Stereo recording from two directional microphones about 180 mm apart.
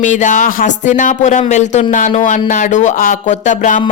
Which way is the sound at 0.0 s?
45° left (ahead or behind).